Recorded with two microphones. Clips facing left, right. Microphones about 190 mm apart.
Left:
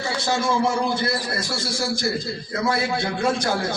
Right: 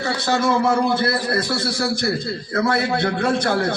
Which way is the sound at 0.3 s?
60° right (ahead or behind).